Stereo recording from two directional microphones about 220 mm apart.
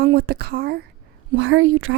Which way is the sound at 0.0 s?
45° right (ahead or behind).